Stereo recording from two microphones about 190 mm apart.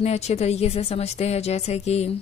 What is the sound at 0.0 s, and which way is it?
Speech, 35° left (ahead or behind).